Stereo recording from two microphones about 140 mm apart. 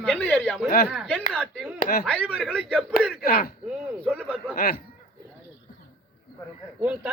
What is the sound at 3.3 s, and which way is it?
Speech, 90° left.